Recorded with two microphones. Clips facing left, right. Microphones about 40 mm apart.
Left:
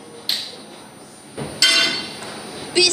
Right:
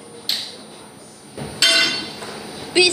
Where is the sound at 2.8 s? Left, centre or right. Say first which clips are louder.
Right 2 dB; right.